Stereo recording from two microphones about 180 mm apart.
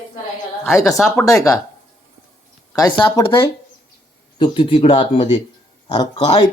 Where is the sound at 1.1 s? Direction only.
15° left (ahead or behind).